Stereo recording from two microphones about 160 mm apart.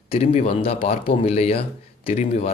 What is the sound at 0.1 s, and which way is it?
Speech, 40° left (ahead or behind).